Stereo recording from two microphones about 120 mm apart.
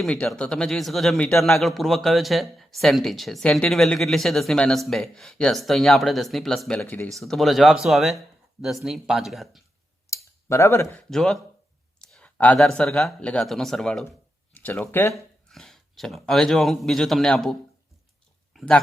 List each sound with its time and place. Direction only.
0.0 s a man's voice: 5° left (ahead or behind)
7.1 s a man's voice: centre (ahead or behind)
10.5 s speech: 25° left (ahead or behind)
10.9 s a man's voice: 5° left (ahead or behind)
14.5 s speech: 15° left (ahead or behind)
15.1 s speech: 5° left (ahead or behind)
18.5 s dog: 5° left (ahead or behind)